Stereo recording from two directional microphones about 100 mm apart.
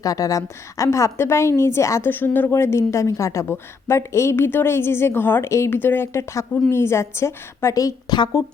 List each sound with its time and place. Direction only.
0.0 s a woman's voice: 35° left (ahead or behind)